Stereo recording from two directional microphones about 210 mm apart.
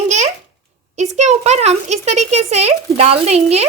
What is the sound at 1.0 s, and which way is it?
A child's voice, 35° right (ahead or behind).